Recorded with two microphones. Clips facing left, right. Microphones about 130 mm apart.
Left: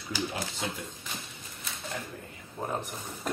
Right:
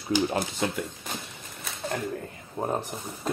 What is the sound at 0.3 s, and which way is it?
Speech, 50° right (ahead or behind).